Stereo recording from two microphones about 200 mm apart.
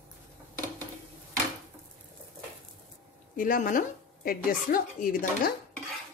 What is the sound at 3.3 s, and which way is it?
Speech, 45° left (ahead or behind).